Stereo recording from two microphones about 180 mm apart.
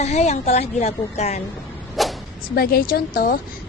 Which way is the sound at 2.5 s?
55° left (ahead or behind).